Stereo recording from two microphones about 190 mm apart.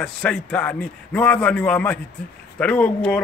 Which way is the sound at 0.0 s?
5° left (ahead or behind).